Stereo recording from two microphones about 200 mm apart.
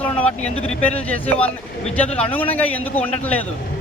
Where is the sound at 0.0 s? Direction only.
5° left (ahead or behind).